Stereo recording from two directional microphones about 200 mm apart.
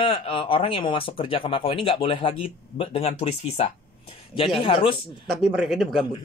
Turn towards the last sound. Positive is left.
turn(degrees=0)  # may be behind; listen again after turning